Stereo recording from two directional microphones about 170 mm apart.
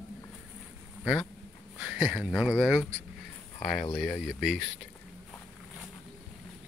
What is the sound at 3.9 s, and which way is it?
Speech, 5° left (ahead or behind).